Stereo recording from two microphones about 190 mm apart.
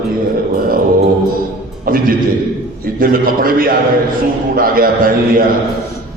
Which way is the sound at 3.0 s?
50° right (ahead or behind).